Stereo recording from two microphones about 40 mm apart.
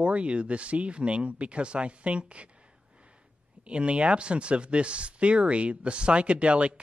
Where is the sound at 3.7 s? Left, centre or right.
Right.